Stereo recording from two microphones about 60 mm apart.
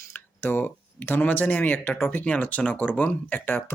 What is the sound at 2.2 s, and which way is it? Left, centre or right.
Speech, left.